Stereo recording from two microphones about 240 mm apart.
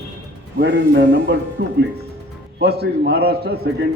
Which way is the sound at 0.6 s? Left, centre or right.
Right.